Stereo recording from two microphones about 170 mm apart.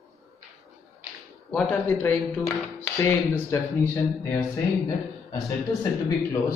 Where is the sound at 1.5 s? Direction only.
5° left (ahead or behind).